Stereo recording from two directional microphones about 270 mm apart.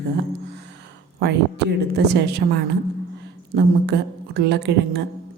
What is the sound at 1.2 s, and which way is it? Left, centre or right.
A woman's voice, right.